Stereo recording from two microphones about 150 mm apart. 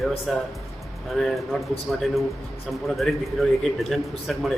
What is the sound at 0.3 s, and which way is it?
A man's voice, centre (ahead or behind).